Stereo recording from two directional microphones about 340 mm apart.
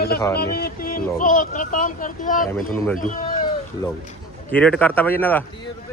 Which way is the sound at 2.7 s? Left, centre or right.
Centre.